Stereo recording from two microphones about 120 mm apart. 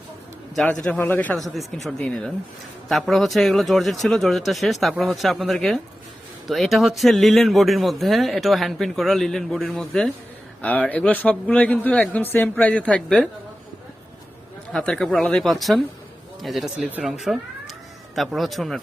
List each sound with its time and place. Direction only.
0.5 s speech: centre (ahead or behind)
0.9 s a man's voice: 15° left (ahead or behind)
1.4 s a man's voice: centre (ahead or behind)
14.7 s speech: 5° left (ahead or behind)